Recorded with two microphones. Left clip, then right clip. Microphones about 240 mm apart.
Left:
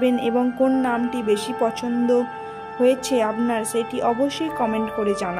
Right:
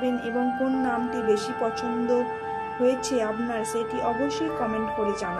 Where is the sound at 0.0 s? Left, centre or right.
Left.